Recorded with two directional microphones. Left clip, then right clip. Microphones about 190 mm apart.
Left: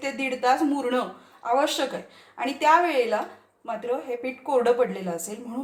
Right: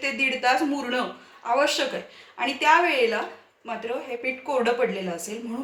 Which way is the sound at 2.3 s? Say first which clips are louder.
Even; 50° left (ahead or behind).